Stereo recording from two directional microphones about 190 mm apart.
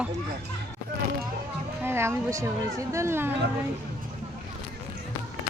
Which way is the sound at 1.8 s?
15° right (ahead or behind).